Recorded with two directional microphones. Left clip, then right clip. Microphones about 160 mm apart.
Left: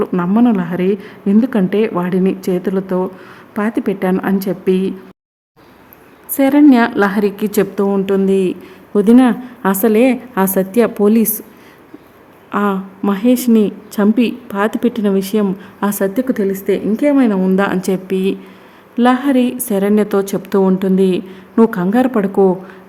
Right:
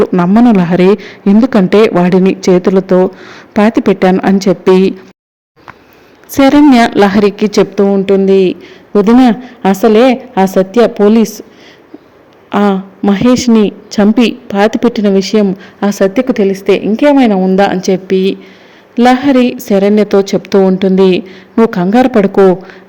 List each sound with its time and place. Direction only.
0.3 s speech: 25° right (ahead or behind)
6.3 s a woman's voice: 20° right (ahead or behind); by 11.4 s centre (ahead or behind)
12.5 s a woman's voice: 15° right (ahead or behind)
17.2 s a woman's voice: centre (ahead or behind)